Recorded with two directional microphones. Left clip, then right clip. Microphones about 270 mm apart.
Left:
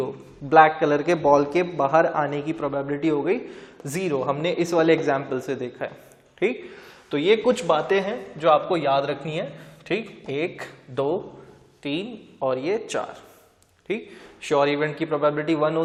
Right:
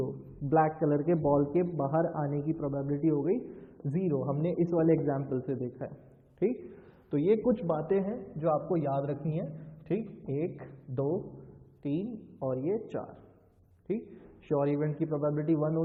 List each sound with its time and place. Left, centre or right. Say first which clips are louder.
0.0 s a man's voice: left 7 dB; centre
11.0 s a man's voice: left 8 dB; left
11.8 s a woman's voice: left 6 dB; centre